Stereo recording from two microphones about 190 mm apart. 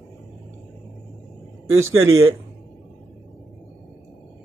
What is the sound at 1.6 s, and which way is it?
Speech, 90° right.